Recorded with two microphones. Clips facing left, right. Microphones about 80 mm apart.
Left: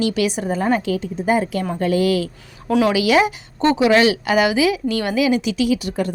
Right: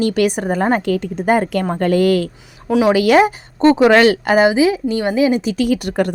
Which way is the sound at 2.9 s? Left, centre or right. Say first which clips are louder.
Right 4 dB; right.